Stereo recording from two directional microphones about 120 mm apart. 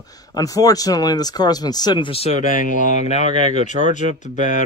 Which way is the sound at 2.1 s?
55° left (ahead or behind).